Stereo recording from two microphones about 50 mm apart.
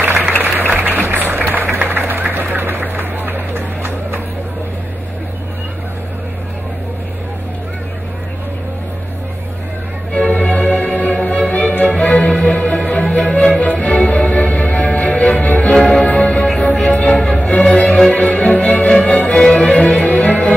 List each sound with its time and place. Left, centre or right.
0.4 s a sound: right
1.0 s music: right
1.9 s a sound: right
10.1 s music: left
15.7 s music: centre
16.1 s music: left
17.7 s music: centre
18.1 s music: left